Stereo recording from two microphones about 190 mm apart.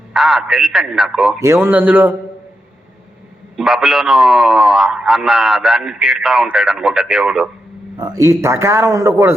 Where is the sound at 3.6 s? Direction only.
Centre (ahead or behind).